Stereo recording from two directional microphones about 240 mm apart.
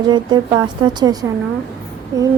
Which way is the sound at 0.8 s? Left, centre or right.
Centre.